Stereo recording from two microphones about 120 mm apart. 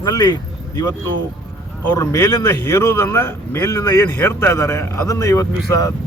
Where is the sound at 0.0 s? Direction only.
35° left (ahead or behind).